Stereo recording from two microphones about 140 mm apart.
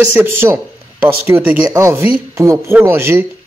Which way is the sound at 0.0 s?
15° right (ahead or behind).